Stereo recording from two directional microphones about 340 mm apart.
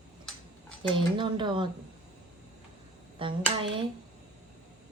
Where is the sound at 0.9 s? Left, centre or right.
Centre.